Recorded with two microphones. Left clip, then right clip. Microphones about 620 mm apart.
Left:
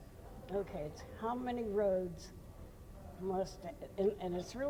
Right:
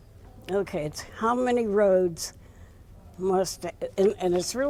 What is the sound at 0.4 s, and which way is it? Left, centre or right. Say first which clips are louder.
Speech: right 12 dB; right.